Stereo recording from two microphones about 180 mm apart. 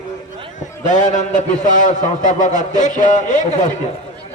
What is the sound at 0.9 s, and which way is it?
A man's voice, 45° left (ahead or behind).